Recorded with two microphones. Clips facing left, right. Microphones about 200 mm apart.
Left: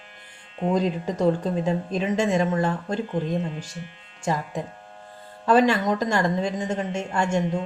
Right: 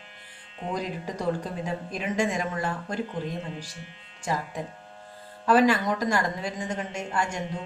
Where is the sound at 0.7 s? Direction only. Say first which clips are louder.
Left 7 dB; 25° left (ahead or behind).